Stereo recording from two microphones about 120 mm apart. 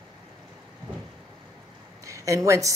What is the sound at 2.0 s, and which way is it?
Speech, 25° right (ahead or behind).